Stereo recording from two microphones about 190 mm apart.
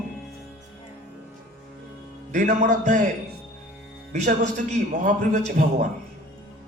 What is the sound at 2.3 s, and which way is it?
Speech, 40° right (ahead or behind).